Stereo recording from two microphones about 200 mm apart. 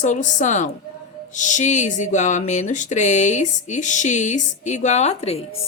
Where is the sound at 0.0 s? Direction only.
40° left (ahead or behind).